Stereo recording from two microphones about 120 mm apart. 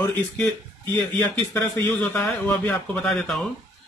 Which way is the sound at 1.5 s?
20° left (ahead or behind).